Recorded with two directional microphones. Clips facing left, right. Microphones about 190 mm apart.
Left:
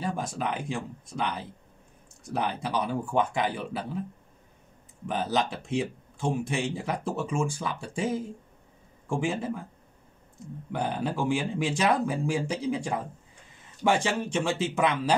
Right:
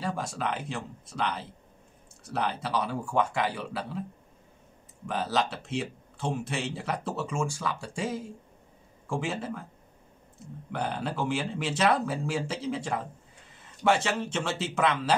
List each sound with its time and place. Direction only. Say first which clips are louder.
0.0 s speech: left 1 dB; 20° left (ahead or behind)
5.0 s speech: left 1 dB; 20° left (ahead or behind)
10.7 s speech: left 2 dB; 15° left (ahead or behind)